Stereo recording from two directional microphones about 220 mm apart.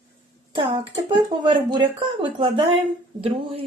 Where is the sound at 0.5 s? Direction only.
20° right (ahead or behind).